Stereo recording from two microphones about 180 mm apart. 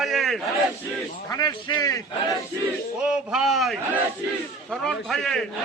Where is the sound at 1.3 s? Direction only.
20° left (ahead or behind).